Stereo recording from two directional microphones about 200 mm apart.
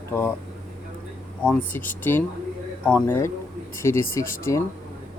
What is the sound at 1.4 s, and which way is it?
Speech, 10° left (ahead or behind).